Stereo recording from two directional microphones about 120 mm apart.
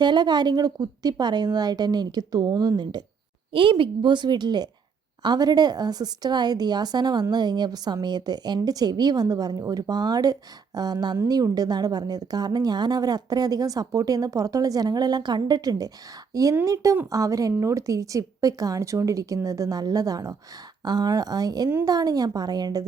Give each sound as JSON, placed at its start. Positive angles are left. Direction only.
{"t": 0.0, "sound": "a woman's voice", "side_deg": -40}